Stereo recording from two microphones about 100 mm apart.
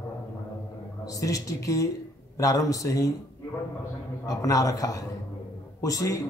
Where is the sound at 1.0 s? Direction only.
35° left (ahead or behind).